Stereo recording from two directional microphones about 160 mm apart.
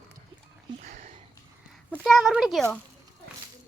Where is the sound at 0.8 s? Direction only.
55° right (ahead or behind).